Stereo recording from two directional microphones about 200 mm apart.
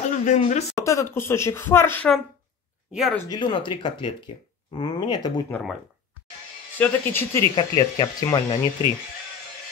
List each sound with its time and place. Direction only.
0.1 s a man's voice: 35° left (ahead or behind)
0.7 s speech: 15° left (ahead or behind)
2.9 s speech: centre (ahead or behind)
3.2 s speech: 20° left (ahead or behind)
5.5 s speech: centre (ahead or behind)
6.8 s speech: 10° left (ahead or behind)
7.5 s speech: 25° left (ahead or behind)